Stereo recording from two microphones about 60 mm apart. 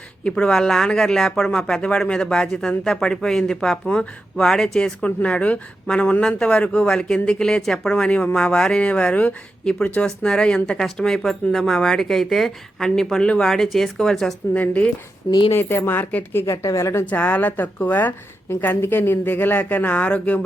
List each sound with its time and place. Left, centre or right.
0.3 s speech: centre
5.0 s a woman's voice: left
14.5 s a woman's voice: left
15.5 s a woman's voice: left
17.1 s speech: left